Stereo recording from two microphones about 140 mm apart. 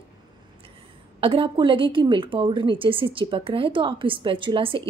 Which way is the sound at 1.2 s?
40° right (ahead or behind).